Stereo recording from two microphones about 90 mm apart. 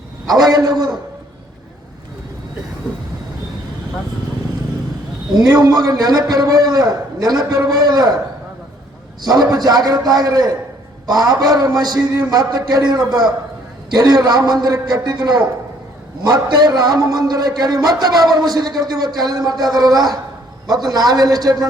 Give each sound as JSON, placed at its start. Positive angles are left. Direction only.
{"t": 0.3, "sound": "a man's voice", "side_deg": -45}
{"t": 5.3, "sound": "a man's voice", "side_deg": -45}
{"t": 9.2, "sound": "a man's voice", "side_deg": -45}